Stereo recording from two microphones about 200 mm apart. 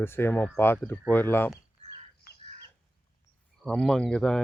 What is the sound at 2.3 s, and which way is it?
Chicken, 50° left (ahead or behind).